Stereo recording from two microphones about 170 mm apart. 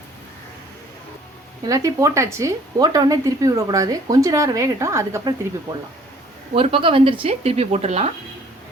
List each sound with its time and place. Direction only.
1.6 s speech: 20° right (ahead or behind)
6.5 s speech: 35° right (ahead or behind)